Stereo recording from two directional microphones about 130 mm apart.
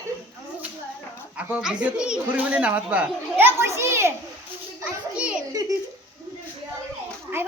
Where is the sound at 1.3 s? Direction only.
10° right (ahead or behind).